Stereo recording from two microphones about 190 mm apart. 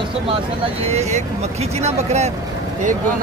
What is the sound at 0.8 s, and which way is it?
Speech, 35° right (ahead or behind).